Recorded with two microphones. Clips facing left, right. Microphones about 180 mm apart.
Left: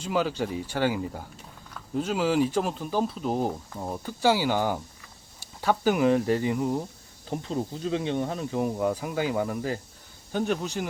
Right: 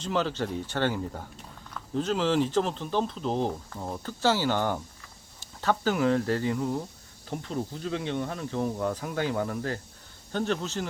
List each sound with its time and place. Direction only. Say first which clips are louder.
0.0 s speech: left 2 dB; 10° left (ahead or behind)